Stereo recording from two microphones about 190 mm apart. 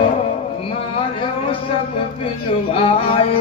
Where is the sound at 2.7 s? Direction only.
30° left (ahead or behind).